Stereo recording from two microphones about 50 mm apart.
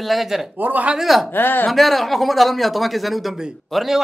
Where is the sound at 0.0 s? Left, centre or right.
Centre.